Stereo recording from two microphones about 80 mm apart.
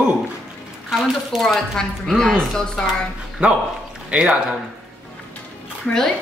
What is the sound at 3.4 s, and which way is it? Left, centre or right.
Speech, centre.